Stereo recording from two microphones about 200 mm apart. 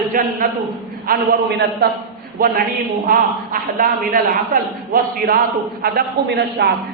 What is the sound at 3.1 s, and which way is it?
A woman's voice, 45° right (ahead or behind).